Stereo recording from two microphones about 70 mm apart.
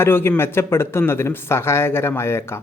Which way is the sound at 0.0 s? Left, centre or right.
Left.